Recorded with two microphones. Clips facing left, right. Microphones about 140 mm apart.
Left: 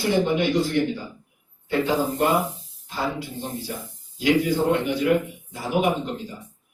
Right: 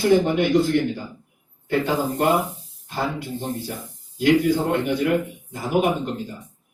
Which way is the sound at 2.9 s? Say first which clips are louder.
Right 2 dB; 55° right (ahead or behind).